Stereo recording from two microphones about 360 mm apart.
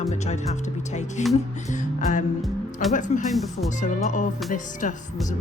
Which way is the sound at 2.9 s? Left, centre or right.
Left.